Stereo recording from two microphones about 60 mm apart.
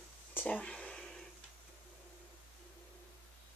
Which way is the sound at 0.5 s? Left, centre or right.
Centre.